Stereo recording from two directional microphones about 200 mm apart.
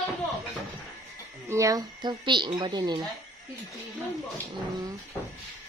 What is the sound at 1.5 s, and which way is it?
A woman's voice, 15° right (ahead or behind).